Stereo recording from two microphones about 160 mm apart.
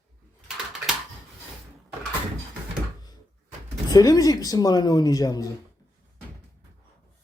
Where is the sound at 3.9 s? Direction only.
25° left (ahead or behind).